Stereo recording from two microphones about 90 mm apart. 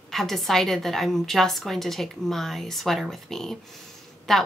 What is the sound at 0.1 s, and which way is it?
Speech, centre (ahead or behind).